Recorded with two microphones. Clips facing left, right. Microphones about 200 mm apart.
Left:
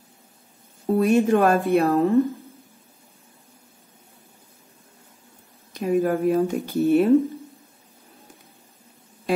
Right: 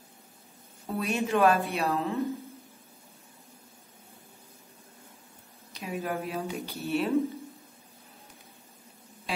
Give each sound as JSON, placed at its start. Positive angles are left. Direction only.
{"t": 0.8, "sound": "speech", "side_deg": 50}
{"t": 5.7, "sound": "speech", "side_deg": 50}